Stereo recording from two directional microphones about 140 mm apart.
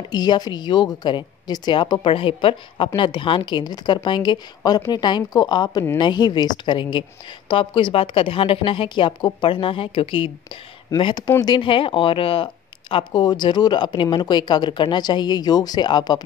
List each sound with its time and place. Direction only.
0.1 s a woman's voice: 30° left (ahead or behind)